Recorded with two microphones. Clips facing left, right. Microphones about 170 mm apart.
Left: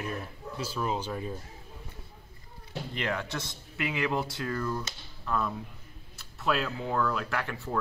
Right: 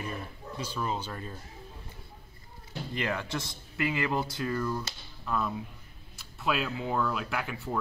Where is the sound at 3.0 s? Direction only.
5° right (ahead or behind).